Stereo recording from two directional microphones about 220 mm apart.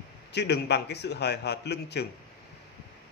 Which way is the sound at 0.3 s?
50° left (ahead or behind).